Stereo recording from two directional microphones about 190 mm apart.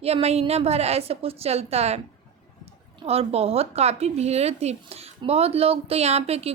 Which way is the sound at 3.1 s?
30° right (ahead or behind).